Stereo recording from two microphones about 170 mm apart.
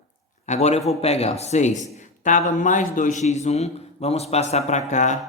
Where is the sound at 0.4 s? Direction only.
40° left (ahead or behind).